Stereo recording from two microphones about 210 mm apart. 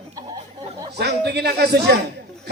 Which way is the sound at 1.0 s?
50° right (ahead or behind).